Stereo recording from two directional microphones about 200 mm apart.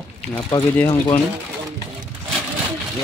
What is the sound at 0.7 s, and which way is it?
Speech, 10° left (ahead or behind).